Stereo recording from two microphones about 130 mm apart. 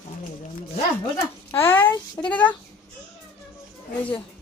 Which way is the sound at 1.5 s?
20° left (ahead or behind).